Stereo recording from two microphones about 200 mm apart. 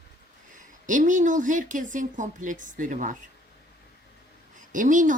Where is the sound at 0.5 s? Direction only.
40° right (ahead or behind).